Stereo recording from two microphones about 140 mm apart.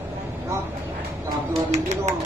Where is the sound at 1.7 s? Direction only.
50° right (ahead or behind).